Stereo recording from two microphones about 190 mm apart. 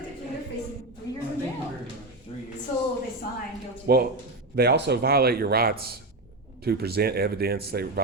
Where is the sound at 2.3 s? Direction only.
30° left (ahead or behind).